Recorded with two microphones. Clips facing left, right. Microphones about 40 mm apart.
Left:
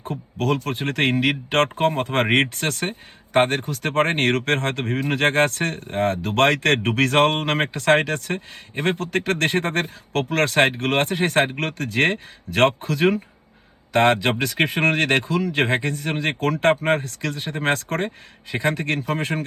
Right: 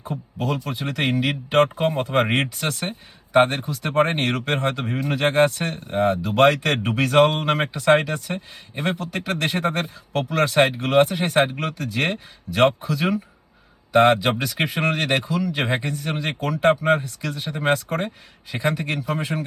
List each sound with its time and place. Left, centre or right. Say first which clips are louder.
0.0 s speech: left 2 dB; left
14.3 s speech: left 2 dB; left